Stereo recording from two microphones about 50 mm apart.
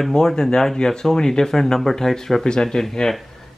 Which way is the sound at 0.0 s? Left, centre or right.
Centre.